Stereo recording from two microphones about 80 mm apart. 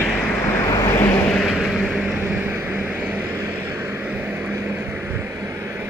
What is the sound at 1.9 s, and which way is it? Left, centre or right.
Vehicle, centre.